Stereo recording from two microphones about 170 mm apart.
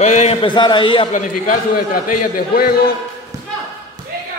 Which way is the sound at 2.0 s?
55° left (ahead or behind).